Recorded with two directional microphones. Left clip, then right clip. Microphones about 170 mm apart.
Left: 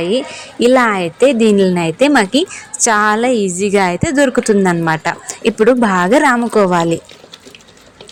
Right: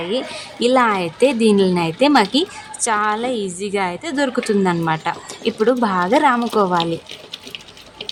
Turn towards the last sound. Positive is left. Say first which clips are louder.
# left 7 dB
turn(degrees=20)  # may be behind; listen again after turning